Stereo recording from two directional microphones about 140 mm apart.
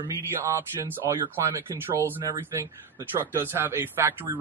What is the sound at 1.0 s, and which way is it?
Speech, 25° right (ahead or behind).